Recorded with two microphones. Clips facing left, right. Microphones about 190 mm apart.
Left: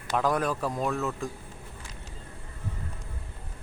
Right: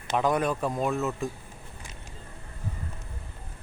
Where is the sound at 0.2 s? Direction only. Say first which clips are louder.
Right 2 dB; centre (ahead or behind).